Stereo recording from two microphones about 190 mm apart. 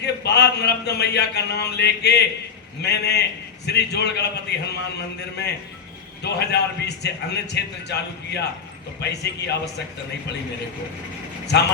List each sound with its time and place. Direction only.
0.0 s a man's voice: 60° left (ahead or behind)
6.2 s a man's voice: 60° left (ahead or behind)
11.5 s a man's voice: 60° left (ahead or behind)